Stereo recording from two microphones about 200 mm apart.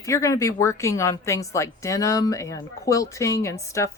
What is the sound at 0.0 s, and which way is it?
A woman's voice, 15° left (ahead or behind).